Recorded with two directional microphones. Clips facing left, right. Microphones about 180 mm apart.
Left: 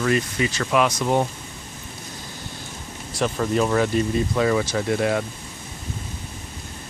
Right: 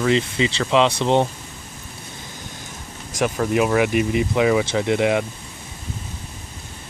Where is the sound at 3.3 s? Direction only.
5° right (ahead or behind).